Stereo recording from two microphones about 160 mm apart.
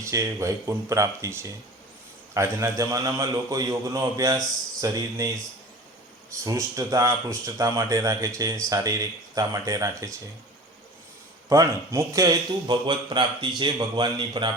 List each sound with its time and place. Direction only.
0.0 s speech: 20° right (ahead or behind)
6.4 s speech: 20° right (ahead or behind)
11.4 s speech: 20° right (ahead or behind)